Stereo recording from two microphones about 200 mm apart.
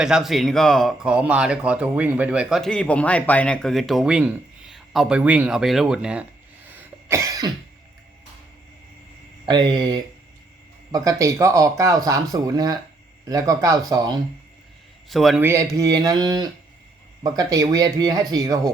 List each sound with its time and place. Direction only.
0.0 s speech: 5° right (ahead or behind)
6.7 s cough: 15° right (ahead or behind)
9.5 s speech: 20° right (ahead or behind)
15.1 s speech: centre (ahead or behind)
15.4 s speech: 15° right (ahead or behind)